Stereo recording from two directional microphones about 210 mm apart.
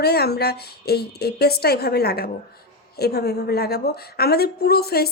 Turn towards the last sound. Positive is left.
turn(degrees=50)  # may be behind; listen again after turning